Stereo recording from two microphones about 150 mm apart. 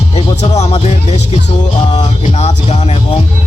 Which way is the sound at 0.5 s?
45° left (ahead or behind).